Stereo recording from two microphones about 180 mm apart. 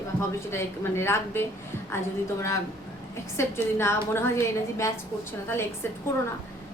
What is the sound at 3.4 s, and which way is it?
A woman's voice, 15° left (ahead or behind).